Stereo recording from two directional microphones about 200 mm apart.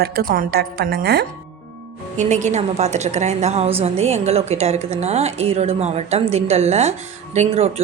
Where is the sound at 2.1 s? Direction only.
35° right (ahead or behind).